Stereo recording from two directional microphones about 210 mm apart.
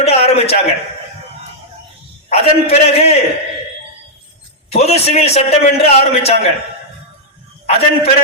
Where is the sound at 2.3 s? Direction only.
30° left (ahead or behind).